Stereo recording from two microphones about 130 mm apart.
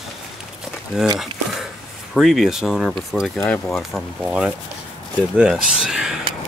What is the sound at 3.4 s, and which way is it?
Speech, 15° left (ahead or behind).